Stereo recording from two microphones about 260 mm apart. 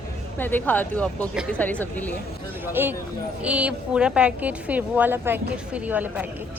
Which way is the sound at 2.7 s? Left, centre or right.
Centre.